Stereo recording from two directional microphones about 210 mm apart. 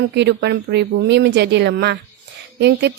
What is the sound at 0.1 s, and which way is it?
Speech, 55° right (ahead or behind).